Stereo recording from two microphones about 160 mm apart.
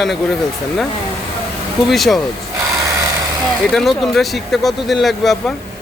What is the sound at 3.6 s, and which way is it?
Speech, centre (ahead or behind).